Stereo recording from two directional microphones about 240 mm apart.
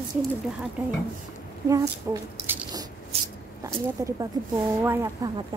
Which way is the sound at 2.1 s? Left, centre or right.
Centre.